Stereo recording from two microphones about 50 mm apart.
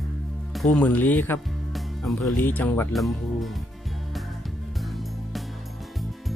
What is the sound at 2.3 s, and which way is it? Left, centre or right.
Speech, left.